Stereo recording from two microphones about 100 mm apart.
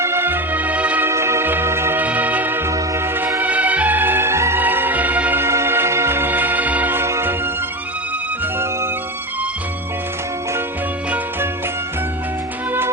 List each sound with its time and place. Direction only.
0.0 s music: 25° right (ahead or behind)
1.1 s music: 25° right (ahead or behind)
3.4 s music: 15° right (ahead or behind)